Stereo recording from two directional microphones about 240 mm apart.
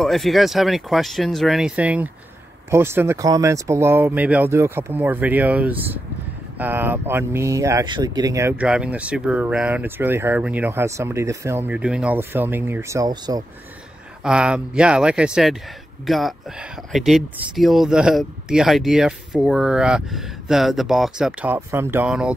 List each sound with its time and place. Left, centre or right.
0.0 s speech: centre
14.2 s speech: centre